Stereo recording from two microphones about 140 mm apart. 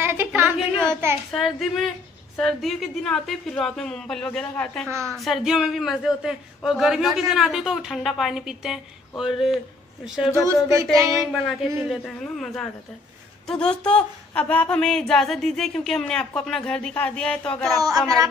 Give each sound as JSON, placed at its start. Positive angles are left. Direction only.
{"t": 0.0, "sound": "a sound", "side_deg": -15}
{"t": 1.3, "sound": "a man's voice", "side_deg": 0}
{"t": 4.8, "sound": "speech", "side_deg": -20}
{"t": 5.1, "sound": "a man's voice", "side_deg": 0}
{"t": 10.4, "sound": "speech", "side_deg": -20}
{"t": 11.1, "sound": "a man's voice", "side_deg": 0}
{"t": 17.8, "sound": "speech", "side_deg": -25}